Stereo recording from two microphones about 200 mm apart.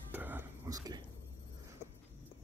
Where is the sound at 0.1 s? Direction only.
10° right (ahead or behind).